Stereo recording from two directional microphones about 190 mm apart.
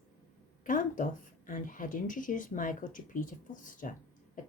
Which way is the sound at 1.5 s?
45° left (ahead or behind).